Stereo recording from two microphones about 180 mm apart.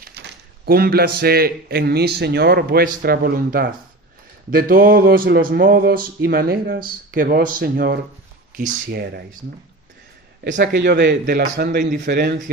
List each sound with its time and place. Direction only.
0.0 s a man's voice: 65° right (ahead or behind)
10.4 s a man's voice: 70° right (ahead or behind)